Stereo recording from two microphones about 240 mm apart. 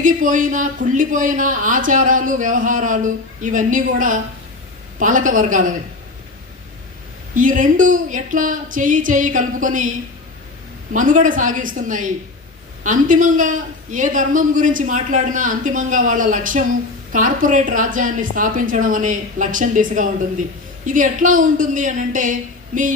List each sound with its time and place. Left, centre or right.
0.0 s speech: right
7.3 s speech: right
10.9 s speech: right